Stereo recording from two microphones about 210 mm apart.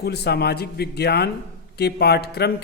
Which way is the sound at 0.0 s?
50° left (ahead or behind).